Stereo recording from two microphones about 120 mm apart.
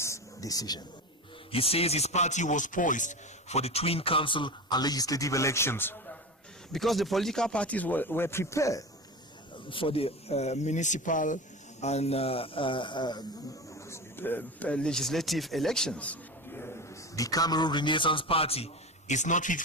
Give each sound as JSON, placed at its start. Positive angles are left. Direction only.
{"t": 0.0, "sound": "a sound", "side_deg": 25}
{"t": 1.5, "sound": "a man's voice", "side_deg": 55}
{"t": 6.7, "sound": "speech", "side_deg": 0}
{"t": 9.6, "sound": "speech", "side_deg": 45}
{"t": 11.8, "sound": "a man's voice", "side_deg": 65}
{"t": 13.8, "sound": "speech", "side_deg": 20}